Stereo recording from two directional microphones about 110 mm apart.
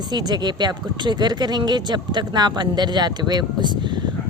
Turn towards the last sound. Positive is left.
turn(degrees=-40)  # may be behind; listen again after turning